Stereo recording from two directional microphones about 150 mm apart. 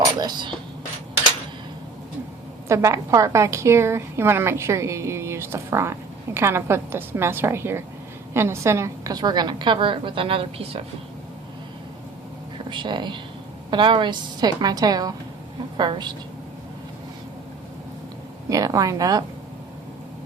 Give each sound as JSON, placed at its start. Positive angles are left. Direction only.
{"t": 0.2, "sound": "speech", "side_deg": -30}
{"t": 2.6, "sound": "a woman's voice", "side_deg": -20}
{"t": 12.7, "sound": "a woman's voice", "side_deg": -30}
{"t": 18.4, "sound": "a woman's voice", "side_deg": -20}